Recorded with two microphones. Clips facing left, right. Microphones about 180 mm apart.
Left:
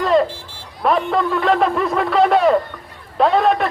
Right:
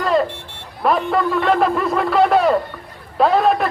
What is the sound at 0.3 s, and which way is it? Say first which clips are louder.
Buzzer: right 1 dB; 65° right (ahead or behind).